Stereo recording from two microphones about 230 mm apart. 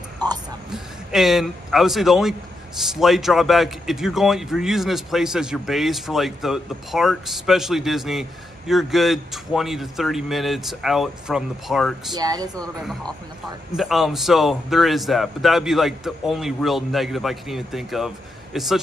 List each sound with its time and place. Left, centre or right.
0.2 s speech: centre
0.7 s a man's voice: centre
12.1 s speech: centre
12.6 s a man's voice: centre